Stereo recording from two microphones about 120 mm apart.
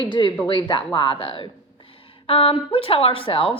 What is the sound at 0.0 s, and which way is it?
A woman's voice, 40° left (ahead or behind).